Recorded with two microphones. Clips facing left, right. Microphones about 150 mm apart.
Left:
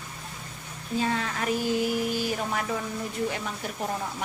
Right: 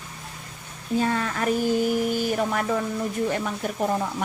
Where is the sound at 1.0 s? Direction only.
45° right (ahead or behind).